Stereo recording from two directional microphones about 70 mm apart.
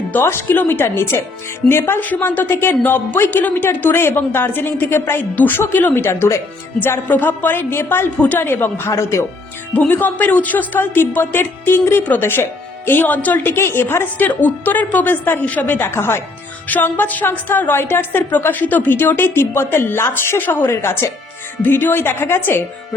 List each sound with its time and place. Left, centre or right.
0.1 s a woman's voice: left
6.7 s a woman's voice: left
8.9 s speech: left
9.7 s a woman's voice: left
16.6 s a woman's voice: left